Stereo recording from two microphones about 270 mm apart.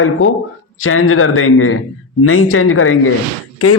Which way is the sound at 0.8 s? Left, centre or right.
Left.